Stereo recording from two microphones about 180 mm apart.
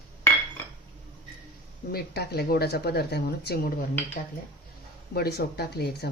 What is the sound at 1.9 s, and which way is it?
Speech, 60° left (ahead or behind).